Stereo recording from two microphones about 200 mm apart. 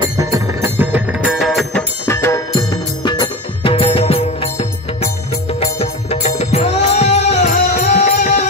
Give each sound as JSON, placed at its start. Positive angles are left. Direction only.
{"t": 0.0, "sound": "music", "side_deg": -15}
{"t": 2.0, "sound": "music", "side_deg": 10}